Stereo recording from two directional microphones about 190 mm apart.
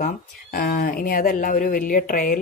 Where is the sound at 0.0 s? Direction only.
50° left (ahead or behind).